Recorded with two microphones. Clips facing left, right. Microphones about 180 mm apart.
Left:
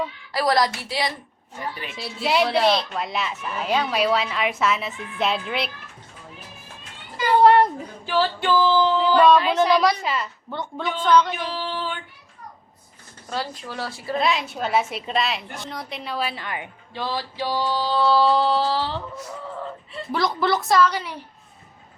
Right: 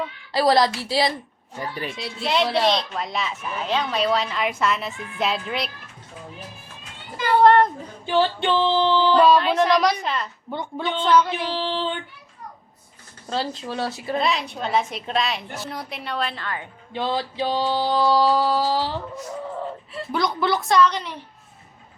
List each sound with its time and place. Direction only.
0.3 s music: 25° right (ahead or behind)
2.0 s speech: 5° left (ahead or behind)
7.2 s cat: 10° left (ahead or behind)
8.0 s music: 20° right (ahead or behind)
9.2 s speech: centre (ahead or behind)
10.5 s a sound: 10° right (ahead or behind)
11.3 s child singing: 30° right (ahead or behind)
13.3 s music: 25° right (ahead or behind)
14.2 s speech: centre (ahead or behind)
16.9 s a sound: 20° right (ahead or behind)
19.9 s speech: centre (ahead or behind)